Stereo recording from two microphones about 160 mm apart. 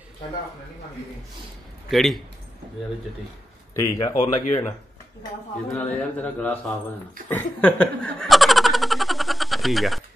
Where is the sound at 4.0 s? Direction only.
25° left (ahead or behind).